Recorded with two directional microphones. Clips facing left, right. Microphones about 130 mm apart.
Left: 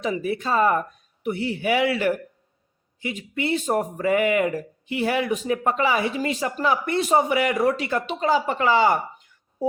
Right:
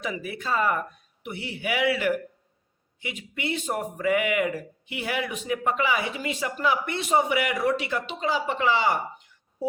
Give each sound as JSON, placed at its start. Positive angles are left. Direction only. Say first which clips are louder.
{"t": 0.0, "sound": "speech", "louder": "left 7 dB", "side_deg": 35}